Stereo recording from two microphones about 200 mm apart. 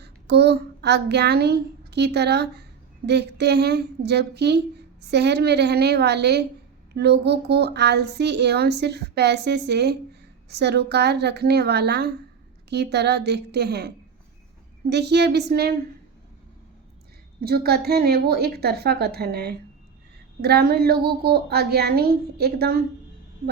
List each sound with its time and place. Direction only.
0.0 s a child's voice: 55° right (ahead or behind)
17.4 s a child's voice: 50° right (ahead or behind)